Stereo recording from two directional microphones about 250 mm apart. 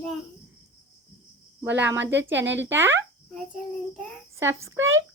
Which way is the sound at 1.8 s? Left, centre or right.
Right.